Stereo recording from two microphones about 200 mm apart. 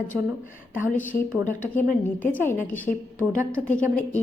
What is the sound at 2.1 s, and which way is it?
Speech, 10° left (ahead or behind).